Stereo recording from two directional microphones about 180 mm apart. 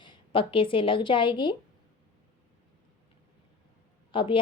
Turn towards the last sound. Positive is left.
turn(degrees=30)  # may be behind; listen again after turning